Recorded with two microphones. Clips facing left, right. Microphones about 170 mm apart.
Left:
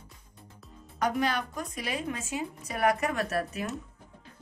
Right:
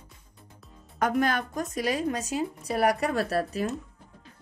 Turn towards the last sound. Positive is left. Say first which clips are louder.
# right 4 dB
turn(degrees=-35)  # may be behind; listen again after turning